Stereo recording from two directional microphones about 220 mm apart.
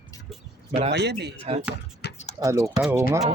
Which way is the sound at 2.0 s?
50° left (ahead or behind).